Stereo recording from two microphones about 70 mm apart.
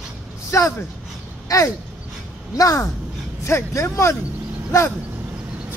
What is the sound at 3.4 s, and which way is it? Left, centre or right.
Speech, left.